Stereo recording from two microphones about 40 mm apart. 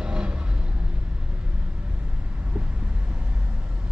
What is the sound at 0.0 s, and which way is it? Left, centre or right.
Vehicle, right.